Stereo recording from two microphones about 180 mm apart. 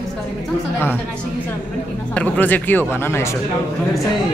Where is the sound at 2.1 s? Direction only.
10° left (ahead or behind).